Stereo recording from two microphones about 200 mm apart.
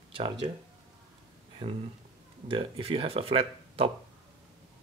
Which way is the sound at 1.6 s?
25° right (ahead or behind).